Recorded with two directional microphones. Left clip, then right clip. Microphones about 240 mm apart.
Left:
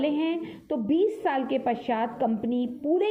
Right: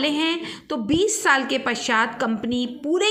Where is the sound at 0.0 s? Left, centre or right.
Centre.